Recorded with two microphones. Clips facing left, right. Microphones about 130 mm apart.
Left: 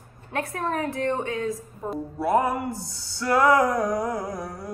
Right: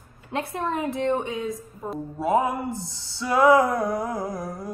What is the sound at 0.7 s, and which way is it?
Speech, 20° right (ahead or behind).